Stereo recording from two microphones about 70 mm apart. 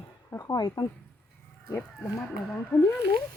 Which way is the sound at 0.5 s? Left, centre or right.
Left.